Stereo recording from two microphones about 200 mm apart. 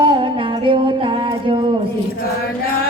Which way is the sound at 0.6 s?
25° right (ahead or behind).